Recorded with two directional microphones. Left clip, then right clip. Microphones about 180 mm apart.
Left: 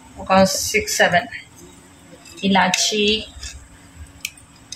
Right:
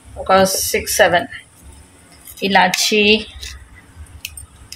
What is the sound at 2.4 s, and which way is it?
Speech, 55° right (ahead or behind).